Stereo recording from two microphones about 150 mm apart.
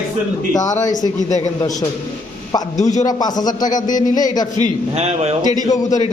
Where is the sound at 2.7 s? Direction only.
50° left (ahead or behind).